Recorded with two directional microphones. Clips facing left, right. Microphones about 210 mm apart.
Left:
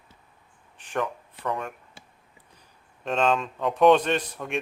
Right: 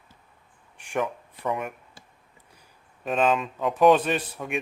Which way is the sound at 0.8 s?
10° right (ahead or behind).